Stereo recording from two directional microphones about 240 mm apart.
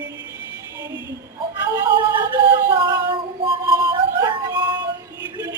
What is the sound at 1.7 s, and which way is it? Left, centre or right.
Music, centre.